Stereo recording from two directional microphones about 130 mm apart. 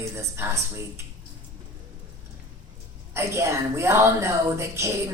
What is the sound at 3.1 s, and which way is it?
A woman's voice, 20° right (ahead or behind).